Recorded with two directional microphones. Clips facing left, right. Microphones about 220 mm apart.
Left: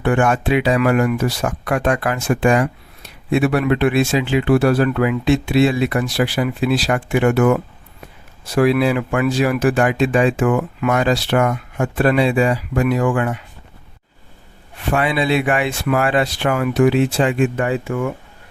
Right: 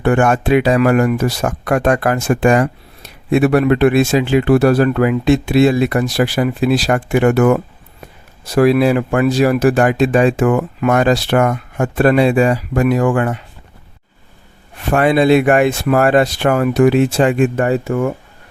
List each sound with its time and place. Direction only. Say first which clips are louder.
0.0 s speech: right 3 dB; 45° right (ahead or behind)
14.8 s speech: right 6 dB; 45° right (ahead or behind)